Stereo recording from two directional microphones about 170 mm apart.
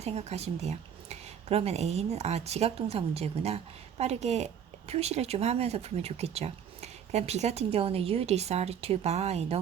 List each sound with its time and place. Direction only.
0.0 s speech: 40° right (ahead or behind)